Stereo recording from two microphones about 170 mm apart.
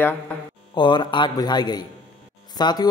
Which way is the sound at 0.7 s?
25° left (ahead or behind).